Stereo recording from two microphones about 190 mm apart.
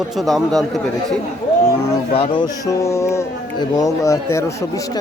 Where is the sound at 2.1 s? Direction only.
30° left (ahead or behind).